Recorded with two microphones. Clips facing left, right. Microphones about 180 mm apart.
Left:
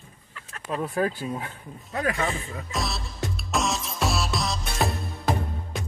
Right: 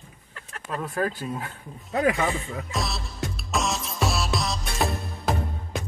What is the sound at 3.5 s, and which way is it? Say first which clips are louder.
Music: even; centre (ahead or behind).